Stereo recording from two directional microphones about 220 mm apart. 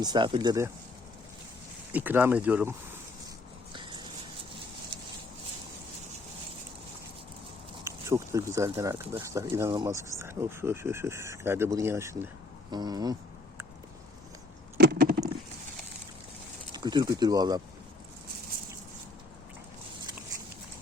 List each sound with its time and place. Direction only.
0.0 s speech: 20° right (ahead or behind)
1.9 s speech: 10° right (ahead or behind)
3.7 s a sound: 20° right (ahead or behind)
7.9 s speech: 15° right (ahead or behind)
14.8 s a sound: 45° right (ahead or behind)
16.7 s speech: 20° right (ahead or behind)